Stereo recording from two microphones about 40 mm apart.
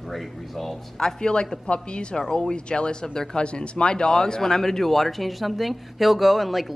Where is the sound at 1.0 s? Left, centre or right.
Centre.